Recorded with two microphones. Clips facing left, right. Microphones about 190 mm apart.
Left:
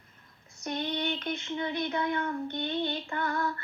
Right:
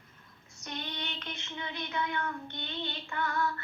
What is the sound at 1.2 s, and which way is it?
Child singing, 35° left (ahead or behind).